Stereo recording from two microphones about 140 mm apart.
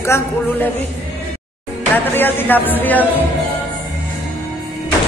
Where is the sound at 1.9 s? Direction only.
15° left (ahead or behind).